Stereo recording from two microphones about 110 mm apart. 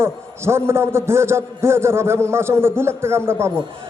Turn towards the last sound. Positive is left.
turn(degrees=-25)  # may be behind; listen again after turning